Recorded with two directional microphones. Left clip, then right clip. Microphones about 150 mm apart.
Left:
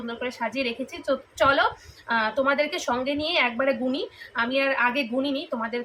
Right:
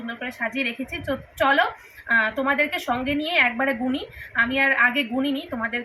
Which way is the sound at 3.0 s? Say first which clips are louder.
Right 5 dB; 30° left (ahead or behind).